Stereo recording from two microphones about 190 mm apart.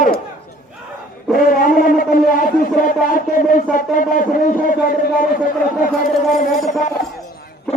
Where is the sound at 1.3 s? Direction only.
50° left (ahead or behind).